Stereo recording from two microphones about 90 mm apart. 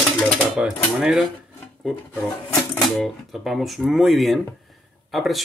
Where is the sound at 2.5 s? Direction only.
Centre (ahead or behind).